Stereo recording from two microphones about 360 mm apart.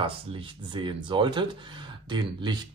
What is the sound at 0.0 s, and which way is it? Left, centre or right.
Speech, centre.